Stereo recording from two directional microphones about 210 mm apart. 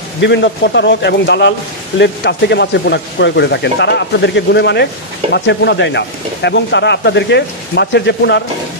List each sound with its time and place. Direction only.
0.2 s speech: 55° left (ahead or behind)